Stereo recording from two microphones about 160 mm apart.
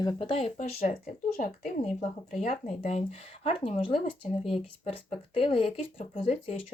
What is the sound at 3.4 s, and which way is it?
Speech, 35° left (ahead or behind).